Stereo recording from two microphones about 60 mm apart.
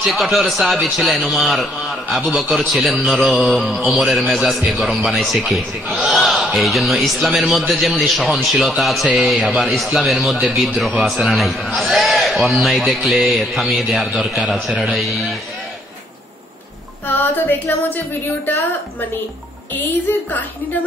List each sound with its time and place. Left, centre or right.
0.0 s a man's voice: centre
17.1 s a woman's voice: left